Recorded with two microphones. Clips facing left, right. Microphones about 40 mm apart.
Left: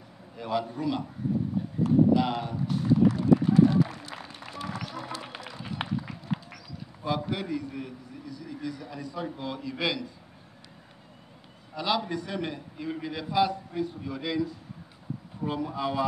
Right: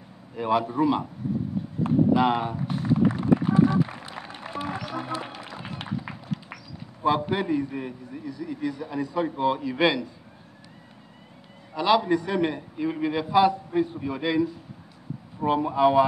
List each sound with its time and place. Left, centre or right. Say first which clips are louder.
0.4 s a man's voice: right 7 dB; right
1.8 s run: right 1 dB; right
3.8 s a sound: right 1 dB; right
4.9 s a man's voice: right 6 dB; right
5.4 s a sound: right 1 dB; right
7.0 s a man's voice: right 7 dB; right
11.7 s a man's voice: right 8 dB; centre